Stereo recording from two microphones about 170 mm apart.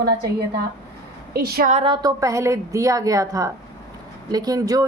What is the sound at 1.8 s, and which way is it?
A woman's voice, 25° right (ahead or behind).